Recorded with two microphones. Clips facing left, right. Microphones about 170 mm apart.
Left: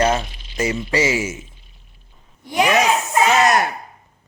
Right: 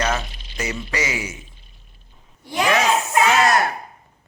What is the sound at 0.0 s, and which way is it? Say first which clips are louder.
Speech: left 5 dB; 30° left (ahead or behind).